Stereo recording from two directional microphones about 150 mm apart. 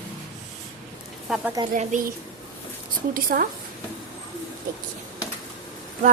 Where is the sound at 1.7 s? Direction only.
60° right (ahead or behind).